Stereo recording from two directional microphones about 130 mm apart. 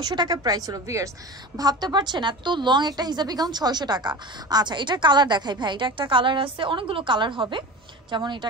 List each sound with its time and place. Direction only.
0.0 s a woman's voice: 30° right (ahead or behind)